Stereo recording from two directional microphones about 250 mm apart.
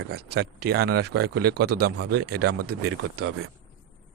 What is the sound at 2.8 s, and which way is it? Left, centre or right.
Speech, right.